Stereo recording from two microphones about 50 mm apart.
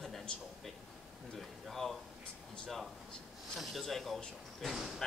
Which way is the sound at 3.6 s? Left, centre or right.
Centre.